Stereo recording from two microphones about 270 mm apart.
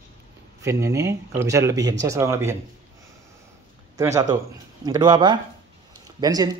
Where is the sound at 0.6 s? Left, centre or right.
Centre.